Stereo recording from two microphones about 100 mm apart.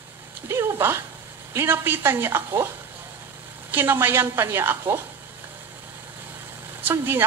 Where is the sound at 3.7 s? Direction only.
20° right (ahead or behind).